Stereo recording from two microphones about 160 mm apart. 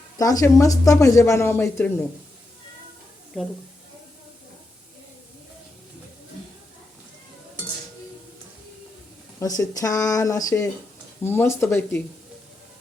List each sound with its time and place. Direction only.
0.2 s speech: 20° left (ahead or behind)
9.4 s speech: 20° left (ahead or behind)